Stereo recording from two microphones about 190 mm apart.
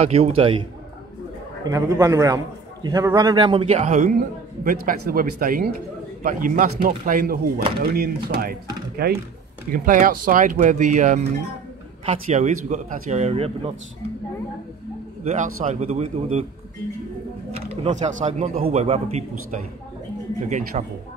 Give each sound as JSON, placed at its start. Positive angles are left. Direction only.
{"t": 0.0, "sound": "speech", "side_deg": -35}
{"t": 1.6, "sound": "a man's voice", "side_deg": -20}
{"t": 4.6, "sound": "speech", "side_deg": -45}
{"t": 15.2, "sound": "speech", "side_deg": -40}
{"t": 17.5, "sound": "speech", "side_deg": -30}
{"t": 20.4, "sound": "speech", "side_deg": -40}